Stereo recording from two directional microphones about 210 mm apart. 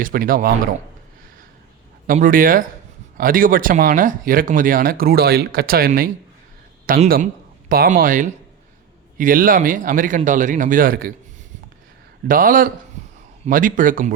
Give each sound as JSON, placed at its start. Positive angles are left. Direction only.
{"t": 0.0, "sound": "speech", "side_deg": -45}
{"t": 2.0, "sound": "speech", "side_deg": -40}
{"t": 12.3, "sound": "speech", "side_deg": -40}